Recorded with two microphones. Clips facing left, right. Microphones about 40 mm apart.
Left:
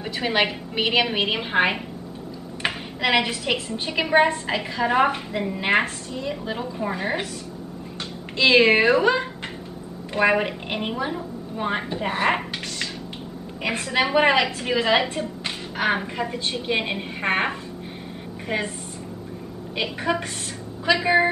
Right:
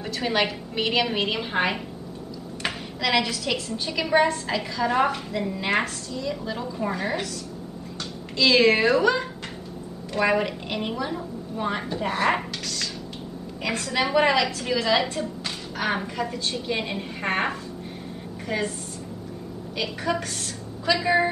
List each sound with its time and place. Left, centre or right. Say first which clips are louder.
0.0 s a woman's voice: left 2 dB; left
6.8 s a woman's voice: right 1 dB; centre
8.4 s a woman's voice: left 2 dB; left
19.8 s a woman's voice: left 2 dB; left